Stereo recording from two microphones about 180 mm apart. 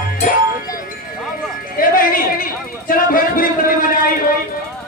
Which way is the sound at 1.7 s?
50° left (ahead or behind).